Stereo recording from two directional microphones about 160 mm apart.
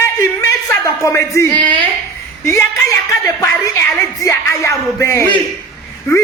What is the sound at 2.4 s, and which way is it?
Speech, 15° left (ahead or behind).